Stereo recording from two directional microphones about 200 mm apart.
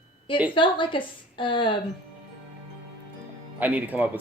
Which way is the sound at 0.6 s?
25° left (ahead or behind).